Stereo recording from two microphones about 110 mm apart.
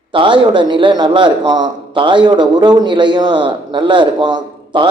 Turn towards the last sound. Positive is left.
turn(degrees=-45)  # may be behind; listen again after turning